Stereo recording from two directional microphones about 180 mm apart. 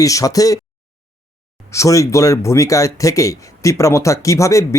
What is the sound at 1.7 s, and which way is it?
Speech, 15° left (ahead or behind).